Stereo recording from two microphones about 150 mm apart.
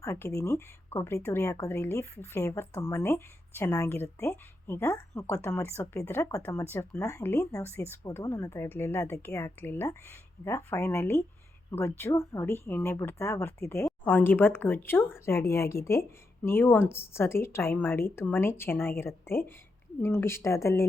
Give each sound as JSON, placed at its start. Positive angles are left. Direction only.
{"t": 0.0, "sound": "speech", "side_deg": 20}